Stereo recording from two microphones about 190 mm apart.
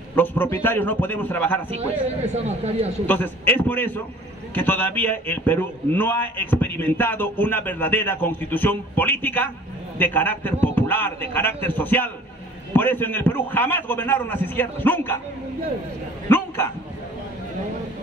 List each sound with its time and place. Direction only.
0.1 s a man's voice: 10° left (ahead or behind)
2.4 s speech: 35° right (ahead or behind)
3.1 s a man's voice: 10° left (ahead or behind)
16.3 s a sound: 10° left (ahead or behind)